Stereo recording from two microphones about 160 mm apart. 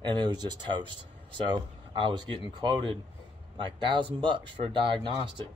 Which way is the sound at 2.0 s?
30° right (ahead or behind).